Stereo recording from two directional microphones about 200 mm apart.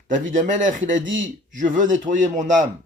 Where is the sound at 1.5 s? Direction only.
40° right (ahead or behind).